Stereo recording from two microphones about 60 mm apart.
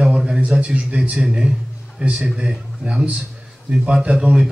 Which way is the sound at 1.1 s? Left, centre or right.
Centre.